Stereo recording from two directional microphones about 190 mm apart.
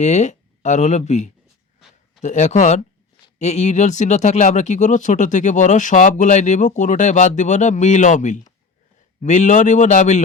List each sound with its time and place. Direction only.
0.0 s speech: 35° left (ahead or behind)